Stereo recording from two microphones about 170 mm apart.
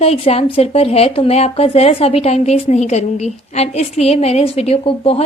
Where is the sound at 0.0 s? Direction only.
35° left (ahead or behind).